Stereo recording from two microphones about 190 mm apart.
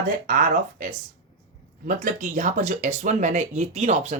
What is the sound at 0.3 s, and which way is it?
Speech, 45° right (ahead or behind).